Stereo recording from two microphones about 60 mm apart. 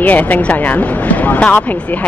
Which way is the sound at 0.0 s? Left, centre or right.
Left.